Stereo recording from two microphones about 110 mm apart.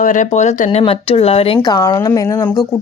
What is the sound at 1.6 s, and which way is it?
Speech, 35° left (ahead or behind).